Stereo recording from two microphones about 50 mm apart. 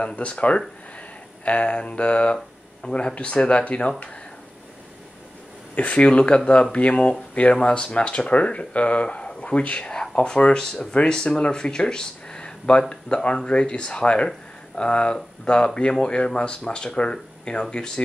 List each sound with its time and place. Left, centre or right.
0.0 s speech: left
5.8 s speech: left